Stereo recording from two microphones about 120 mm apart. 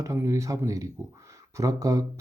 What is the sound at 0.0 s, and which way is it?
Speech, 25° right (ahead or behind).